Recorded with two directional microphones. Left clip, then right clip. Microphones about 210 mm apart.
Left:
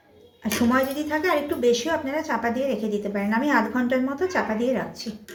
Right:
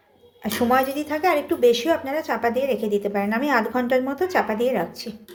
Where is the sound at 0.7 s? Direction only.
45° right (ahead or behind).